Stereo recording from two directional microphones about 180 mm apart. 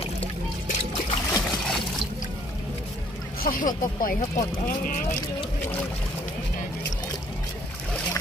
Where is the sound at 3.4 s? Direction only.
50° left (ahead or behind).